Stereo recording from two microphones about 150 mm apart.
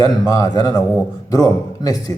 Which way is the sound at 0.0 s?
25° left (ahead or behind).